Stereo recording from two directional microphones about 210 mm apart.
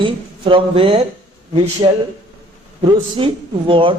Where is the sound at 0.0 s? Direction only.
25° right (ahead or behind).